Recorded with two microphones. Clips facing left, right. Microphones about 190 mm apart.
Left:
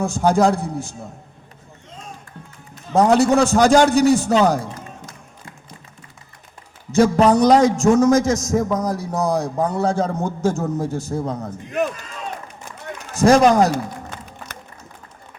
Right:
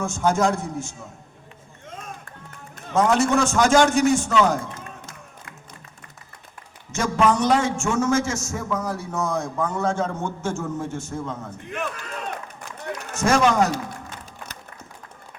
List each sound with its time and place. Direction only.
0.0 s a man's voice: 35° left (ahead or behind)
2.9 s a man's voice: 35° left (ahead or behind)
6.9 s a man's voice: 35° left (ahead or behind)
13.1 s a man's voice: 35° left (ahead or behind)